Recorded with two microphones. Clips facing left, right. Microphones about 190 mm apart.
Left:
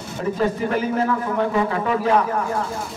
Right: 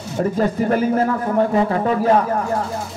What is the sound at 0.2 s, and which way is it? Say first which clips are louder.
A man's voice: right 3 dB; 40° right (ahead or behind).